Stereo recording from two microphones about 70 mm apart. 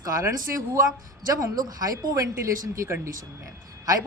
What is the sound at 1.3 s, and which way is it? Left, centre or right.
Speech, right.